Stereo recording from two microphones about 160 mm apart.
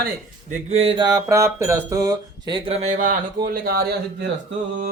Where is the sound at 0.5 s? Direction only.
40° right (ahead or behind); by 4.3 s 75° right (ahead or behind).